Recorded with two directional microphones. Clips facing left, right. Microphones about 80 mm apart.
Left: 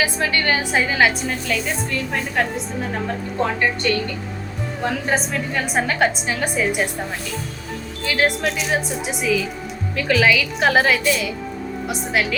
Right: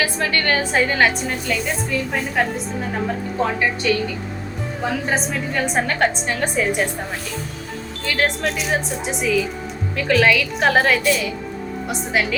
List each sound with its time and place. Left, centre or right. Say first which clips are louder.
0.0 s a woman's voice: even; centre
8.0 s a woman's voice: left 1 dB; centre